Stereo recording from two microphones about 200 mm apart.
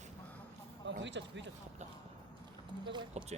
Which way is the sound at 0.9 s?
65° right (ahead or behind).